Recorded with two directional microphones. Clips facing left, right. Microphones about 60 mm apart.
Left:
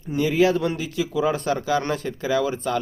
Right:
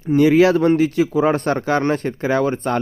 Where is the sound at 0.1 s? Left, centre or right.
Right.